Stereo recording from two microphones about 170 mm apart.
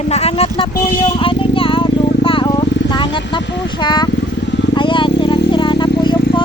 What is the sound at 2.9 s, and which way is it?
Vehicle, 30° left (ahead or behind).